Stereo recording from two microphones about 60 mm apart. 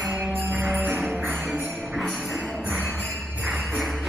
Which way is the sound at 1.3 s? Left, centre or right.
Centre.